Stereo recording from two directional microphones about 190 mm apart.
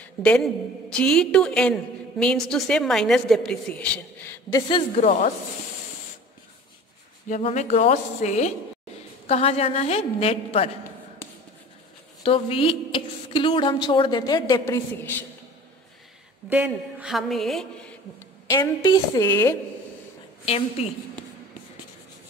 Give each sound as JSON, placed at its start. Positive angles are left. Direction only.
{"t": 0.0, "sound": "a woman's voice", "side_deg": 5}
{"t": 4.9, "sound": "a woman's voice", "side_deg": 40}
{"t": 7.2, "sound": "a woman's voice", "side_deg": 40}
{"t": 12.2, "sound": "a woman's voice", "side_deg": 30}
{"t": 16.4, "sound": "a woman's voice", "side_deg": -5}
{"t": 18.5, "sound": "a woman's voice", "side_deg": 20}
{"t": 20.4, "sound": "a woman's voice", "side_deg": 30}